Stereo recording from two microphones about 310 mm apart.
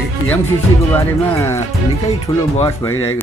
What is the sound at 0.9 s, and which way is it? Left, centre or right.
Speech, centre.